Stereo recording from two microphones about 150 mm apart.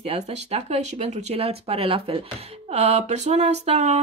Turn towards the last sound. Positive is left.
turn(degrees=-45)  # may be behind; listen again after turning